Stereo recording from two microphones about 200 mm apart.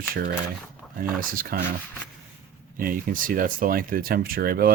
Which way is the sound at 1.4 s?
45° right (ahead or behind).